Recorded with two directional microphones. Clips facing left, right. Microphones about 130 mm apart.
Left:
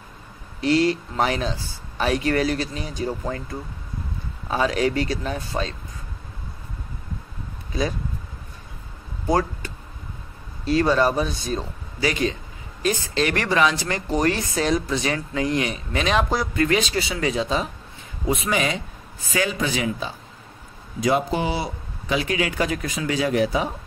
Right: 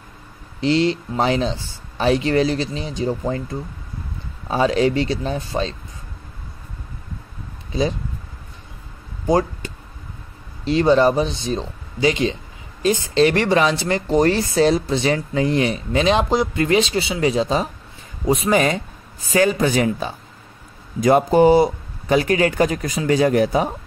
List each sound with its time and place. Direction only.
0.6 s speech: 25° right (ahead or behind)
7.7 s speech: 25° right (ahead or behind)
9.3 s vehicle: 25° right (ahead or behind)
10.6 s speech: 25° right (ahead or behind); by 23.7 s 45° right (ahead or behind)